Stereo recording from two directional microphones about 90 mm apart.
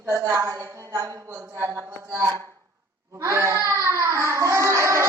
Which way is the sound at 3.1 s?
30° right (ahead or behind).